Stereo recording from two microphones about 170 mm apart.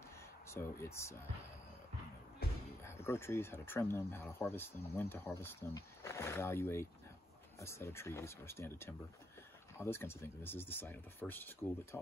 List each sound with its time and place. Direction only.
0.5 s speech: 15° left (ahead or behind)
2.4 s music: 70° left (ahead or behind)
2.8 s speech: 15° left (ahead or behind)